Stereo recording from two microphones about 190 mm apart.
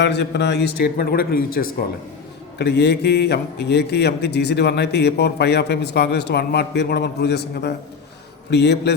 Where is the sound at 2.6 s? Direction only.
60° left (ahead or behind).